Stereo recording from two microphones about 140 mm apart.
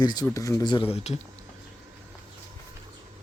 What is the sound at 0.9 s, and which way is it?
Speech, 45° left (ahead or behind).